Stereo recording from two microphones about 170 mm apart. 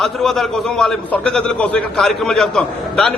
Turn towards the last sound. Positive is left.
turn(degrees=0)  # may be behind; listen again after turning